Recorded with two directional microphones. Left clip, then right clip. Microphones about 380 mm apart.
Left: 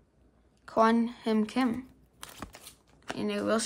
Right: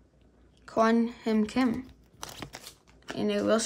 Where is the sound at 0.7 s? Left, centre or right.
Centre.